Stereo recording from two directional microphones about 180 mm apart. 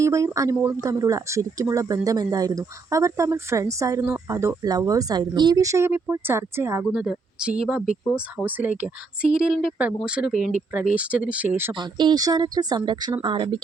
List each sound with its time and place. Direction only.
0.0 s a woman's voice: 15° right (ahead or behind)
11.7 s speech: 25° right (ahead or behind)